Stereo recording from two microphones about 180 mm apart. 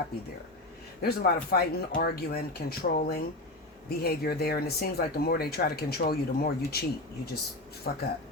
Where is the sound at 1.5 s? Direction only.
60° left (ahead or behind).